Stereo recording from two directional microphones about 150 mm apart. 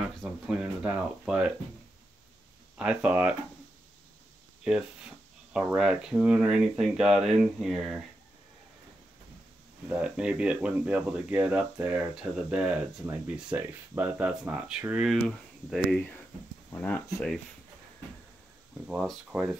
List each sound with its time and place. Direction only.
0.2 s speech: 5° right (ahead or behind)
2.8 s speech: 10° right (ahead or behind)
5.5 s speech: 5° right (ahead or behind)
9.8 s speech: 5° right (ahead or behind)
18.9 s speech: 5° right (ahead or behind)